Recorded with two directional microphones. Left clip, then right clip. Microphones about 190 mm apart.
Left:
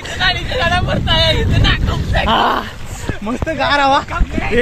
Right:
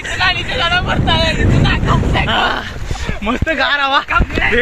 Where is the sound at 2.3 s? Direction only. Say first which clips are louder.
Left 3 dB; 35° left (ahead or behind).